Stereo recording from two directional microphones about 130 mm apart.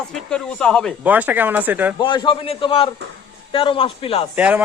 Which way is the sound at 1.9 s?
35° left (ahead or behind).